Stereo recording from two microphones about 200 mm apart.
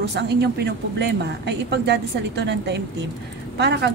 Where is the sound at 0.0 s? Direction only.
55° right (ahead or behind).